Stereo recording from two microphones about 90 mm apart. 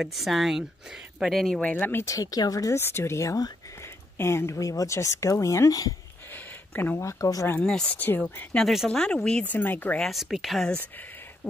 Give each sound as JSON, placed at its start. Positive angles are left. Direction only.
{"t": 0.0, "sound": "speech", "side_deg": 0}
{"t": 1.6, "sound": "speech", "side_deg": 15}
{"t": 2.0, "sound": "speech", "side_deg": 40}
{"t": 2.8, "sound": "speech", "side_deg": 30}
{"t": 6.3, "sound": "a sound", "side_deg": 20}
{"t": 7.0, "sound": "speech", "side_deg": 35}
{"t": 7.6, "sound": "speech", "side_deg": 10}
{"t": 8.5, "sound": "speech", "side_deg": 0}
{"t": 9.9, "sound": "speech", "side_deg": 0}